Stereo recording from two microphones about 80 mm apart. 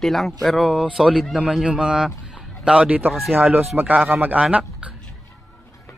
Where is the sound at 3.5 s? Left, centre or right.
Right.